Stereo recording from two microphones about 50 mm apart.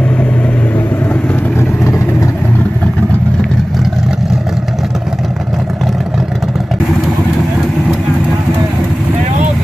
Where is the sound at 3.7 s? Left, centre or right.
Centre.